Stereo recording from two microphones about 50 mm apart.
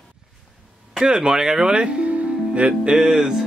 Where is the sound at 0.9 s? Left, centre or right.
Centre.